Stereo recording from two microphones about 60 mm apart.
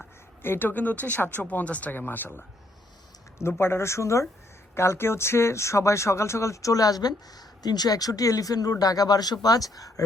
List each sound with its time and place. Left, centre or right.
0.4 s speech: left
3.3 s speech: left